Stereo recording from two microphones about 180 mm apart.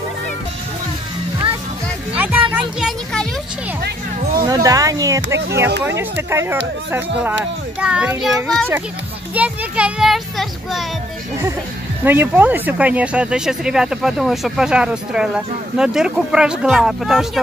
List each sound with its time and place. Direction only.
2.1 s music: 10° right (ahead or behind)
2.8 s a sound: 5° left (ahead or behind)
3.8 s speech: 55° right (ahead or behind)
4.6 s speech: 20° right (ahead or behind)
5.7 s speech: 75° right (ahead or behind)
6.3 s speech: 15° right (ahead or behind)
7.8 s speech: 5° right (ahead or behind)
12.0 s speech: 10° right (ahead or behind)